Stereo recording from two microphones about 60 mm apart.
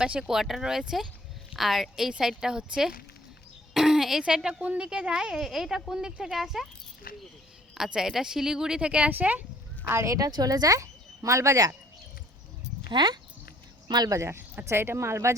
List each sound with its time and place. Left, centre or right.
0.0 s a woman's voice: centre
3.8 s a sound: centre
4.6 s a woman's voice: centre
7.8 s speech: centre
9.8 s speech: right
10.1 s speech: right
14.2 s speech: right